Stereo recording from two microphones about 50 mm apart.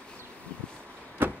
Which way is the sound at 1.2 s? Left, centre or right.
Right.